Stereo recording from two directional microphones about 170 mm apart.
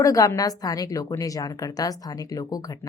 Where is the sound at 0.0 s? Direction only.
20° left (ahead or behind).